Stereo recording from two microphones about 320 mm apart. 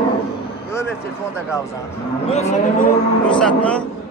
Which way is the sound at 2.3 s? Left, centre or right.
Left.